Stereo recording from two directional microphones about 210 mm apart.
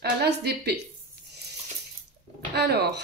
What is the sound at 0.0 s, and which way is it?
Speech, 50° right (ahead or behind).